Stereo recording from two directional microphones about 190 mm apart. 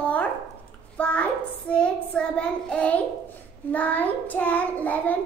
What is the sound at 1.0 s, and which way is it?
A woman's voice, 5° left (ahead or behind).